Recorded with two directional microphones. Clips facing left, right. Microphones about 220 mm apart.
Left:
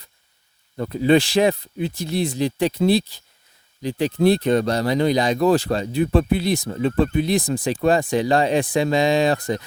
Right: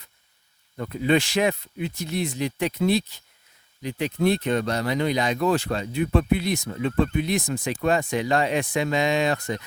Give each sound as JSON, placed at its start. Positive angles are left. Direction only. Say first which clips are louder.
{"t": 0.8, "sound": "speech", "louder": "left 5 dB", "side_deg": 35}